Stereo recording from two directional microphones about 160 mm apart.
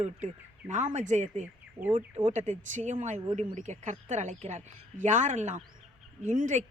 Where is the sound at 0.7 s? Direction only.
50° right (ahead or behind).